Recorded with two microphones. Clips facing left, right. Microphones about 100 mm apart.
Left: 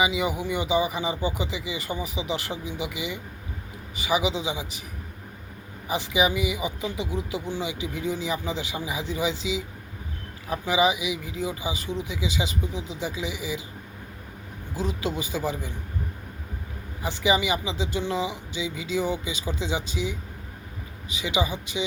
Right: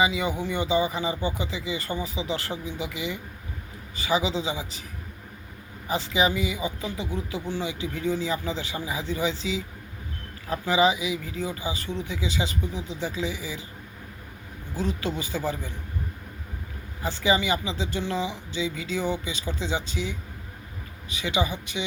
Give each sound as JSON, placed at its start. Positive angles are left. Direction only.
{"t": 0.0, "sound": "speech", "side_deg": 15}
{"t": 5.9, "sound": "speech", "side_deg": 15}
{"t": 14.8, "sound": "speech", "side_deg": 15}
{"t": 17.0, "sound": "speech", "side_deg": 15}